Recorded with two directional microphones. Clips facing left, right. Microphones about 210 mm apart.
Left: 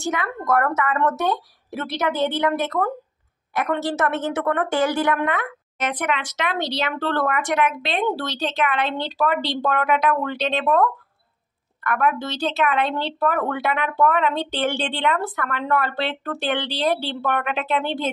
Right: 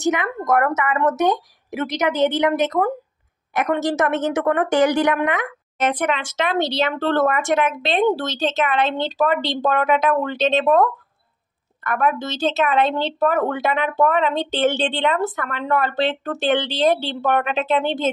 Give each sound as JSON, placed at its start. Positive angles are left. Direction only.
{"t": 0.0, "sound": "speech", "side_deg": -20}
{"t": 5.8, "sound": "speech", "side_deg": -30}